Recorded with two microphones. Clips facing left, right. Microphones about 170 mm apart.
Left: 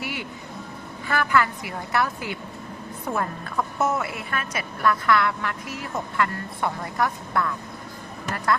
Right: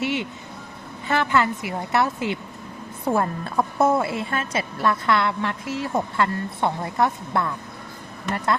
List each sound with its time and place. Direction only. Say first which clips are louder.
0.0 s vehicle: right 7 dB; 25° right (ahead or behind)
1.0 s a woman's voice: right 2 dB; 25° right (ahead or behind)